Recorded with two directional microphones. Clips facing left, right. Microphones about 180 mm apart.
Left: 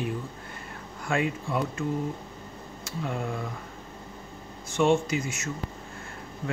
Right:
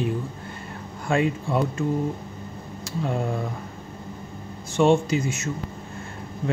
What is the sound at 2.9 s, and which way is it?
Speech, 30° right (ahead or behind).